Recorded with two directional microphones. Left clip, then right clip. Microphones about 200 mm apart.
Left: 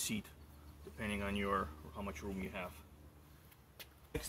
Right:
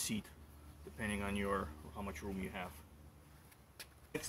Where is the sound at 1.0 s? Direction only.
20° right (ahead or behind).